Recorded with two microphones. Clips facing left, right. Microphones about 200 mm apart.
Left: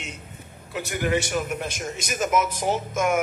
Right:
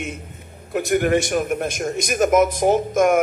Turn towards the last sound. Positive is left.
turn(degrees=-55)  # may be behind; listen again after turning